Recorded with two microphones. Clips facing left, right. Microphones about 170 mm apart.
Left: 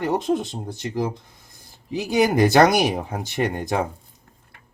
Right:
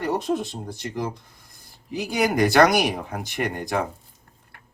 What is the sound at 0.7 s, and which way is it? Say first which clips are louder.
Speech: left 6 dB; 25° left (ahead or behind).